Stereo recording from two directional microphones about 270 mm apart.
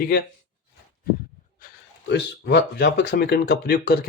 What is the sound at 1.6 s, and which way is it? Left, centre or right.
Speech, left.